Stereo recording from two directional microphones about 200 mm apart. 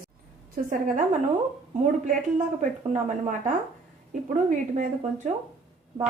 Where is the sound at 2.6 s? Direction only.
40° right (ahead or behind).